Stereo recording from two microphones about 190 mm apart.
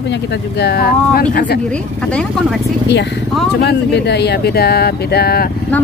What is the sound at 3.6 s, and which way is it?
Speech, 60° left (ahead or behind).